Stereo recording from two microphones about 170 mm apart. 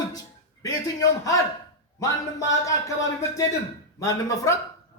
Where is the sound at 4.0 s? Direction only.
20° left (ahead or behind).